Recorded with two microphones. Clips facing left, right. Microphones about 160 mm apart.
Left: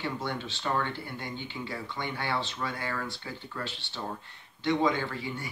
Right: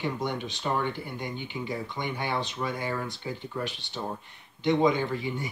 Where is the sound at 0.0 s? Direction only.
15° right (ahead or behind).